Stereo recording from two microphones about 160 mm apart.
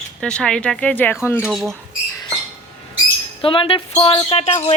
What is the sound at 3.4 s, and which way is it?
Speech, 35° left (ahead or behind).